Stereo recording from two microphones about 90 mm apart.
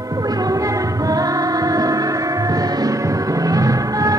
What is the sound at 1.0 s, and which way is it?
Music, 40° right (ahead or behind).